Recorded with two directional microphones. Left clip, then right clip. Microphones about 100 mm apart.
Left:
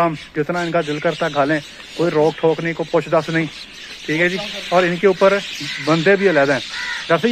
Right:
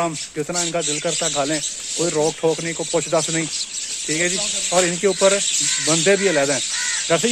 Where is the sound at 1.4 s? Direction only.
25° right (ahead or behind).